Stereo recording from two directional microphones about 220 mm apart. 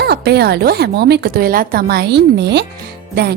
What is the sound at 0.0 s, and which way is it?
A woman's voice, 45° right (ahead or behind).